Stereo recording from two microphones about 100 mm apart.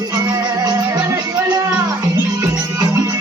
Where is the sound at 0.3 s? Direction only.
45° right (ahead or behind).